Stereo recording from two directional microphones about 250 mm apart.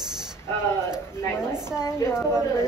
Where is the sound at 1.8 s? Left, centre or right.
Centre.